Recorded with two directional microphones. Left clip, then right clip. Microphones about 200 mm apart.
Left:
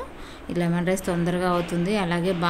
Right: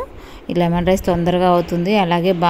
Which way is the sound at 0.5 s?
35° right (ahead or behind).